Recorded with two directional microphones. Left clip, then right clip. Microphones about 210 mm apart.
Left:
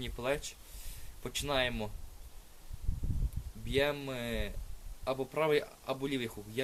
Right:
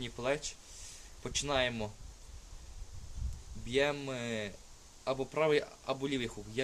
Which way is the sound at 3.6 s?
Centre (ahead or behind).